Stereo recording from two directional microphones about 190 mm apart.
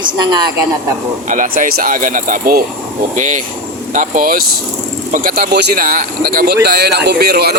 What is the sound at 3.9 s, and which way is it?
Speech, 40° right (ahead or behind).